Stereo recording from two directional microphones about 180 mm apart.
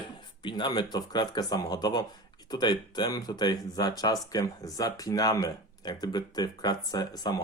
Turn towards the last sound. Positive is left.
turn(degrees=20)  # may be behind; listen again after turning